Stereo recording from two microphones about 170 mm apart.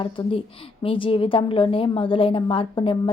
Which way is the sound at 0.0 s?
30° left (ahead or behind).